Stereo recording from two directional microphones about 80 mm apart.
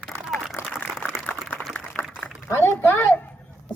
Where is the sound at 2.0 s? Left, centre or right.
Left.